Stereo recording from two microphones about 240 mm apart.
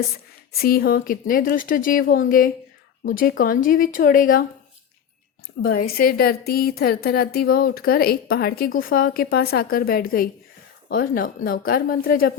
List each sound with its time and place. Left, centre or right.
0.5 s a woman's voice: left
5.9 s a woman's voice: left